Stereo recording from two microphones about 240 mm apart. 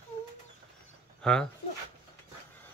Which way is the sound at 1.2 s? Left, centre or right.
Centre.